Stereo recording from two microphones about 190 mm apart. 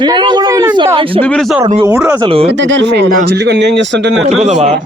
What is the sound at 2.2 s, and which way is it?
Speech, 30° right (ahead or behind).